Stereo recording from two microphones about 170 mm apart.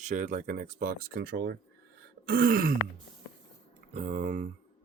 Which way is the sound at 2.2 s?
60° right (ahead or behind).